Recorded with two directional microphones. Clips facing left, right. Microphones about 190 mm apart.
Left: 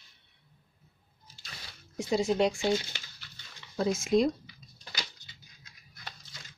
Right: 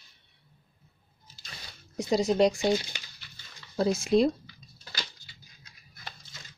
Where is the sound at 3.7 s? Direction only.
35° right (ahead or behind).